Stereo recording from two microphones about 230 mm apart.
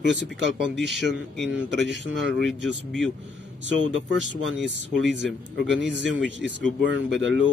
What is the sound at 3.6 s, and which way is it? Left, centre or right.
Speech, right.